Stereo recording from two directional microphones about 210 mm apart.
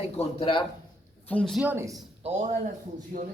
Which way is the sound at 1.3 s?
5° left (ahead or behind).